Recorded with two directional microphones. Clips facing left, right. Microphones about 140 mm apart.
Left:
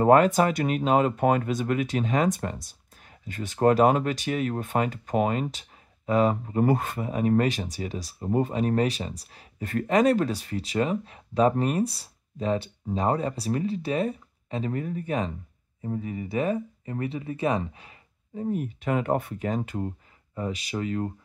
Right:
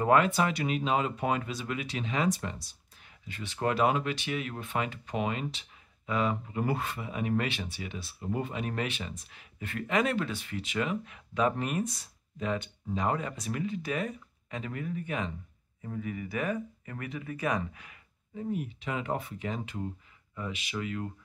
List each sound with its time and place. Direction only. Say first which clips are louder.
0.0 s speech: left 6 dB; 40° left (ahead or behind)